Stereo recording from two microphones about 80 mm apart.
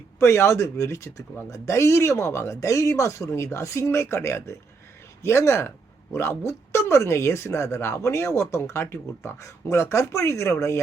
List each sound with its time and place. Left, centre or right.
0.2 s speech: left